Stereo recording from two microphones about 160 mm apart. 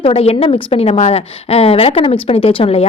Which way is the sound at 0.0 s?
40° left (ahead or behind).